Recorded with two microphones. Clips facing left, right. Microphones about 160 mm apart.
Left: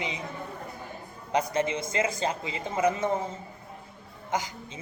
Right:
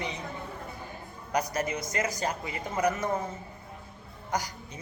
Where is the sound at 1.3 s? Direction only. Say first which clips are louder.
Left 3 dB; 25° left (ahead or behind).